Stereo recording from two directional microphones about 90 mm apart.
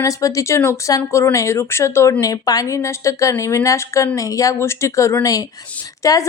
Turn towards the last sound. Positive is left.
turn(degrees=40)  # may be behind; listen again after turning